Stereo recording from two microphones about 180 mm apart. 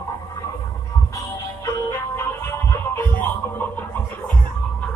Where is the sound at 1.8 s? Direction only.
15° left (ahead or behind).